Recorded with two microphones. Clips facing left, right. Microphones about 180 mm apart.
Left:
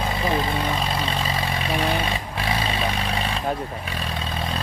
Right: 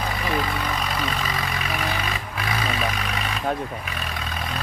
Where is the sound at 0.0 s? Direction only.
25° left (ahead or behind).